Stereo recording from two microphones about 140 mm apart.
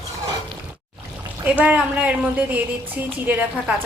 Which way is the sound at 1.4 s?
10° right (ahead or behind).